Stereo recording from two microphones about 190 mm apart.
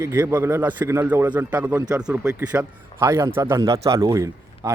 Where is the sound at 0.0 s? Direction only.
10° right (ahead or behind).